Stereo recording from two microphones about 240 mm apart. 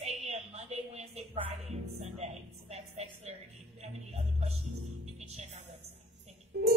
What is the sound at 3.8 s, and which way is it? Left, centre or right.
Music, right.